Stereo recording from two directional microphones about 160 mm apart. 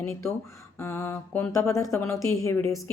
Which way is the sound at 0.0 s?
15° left (ahead or behind).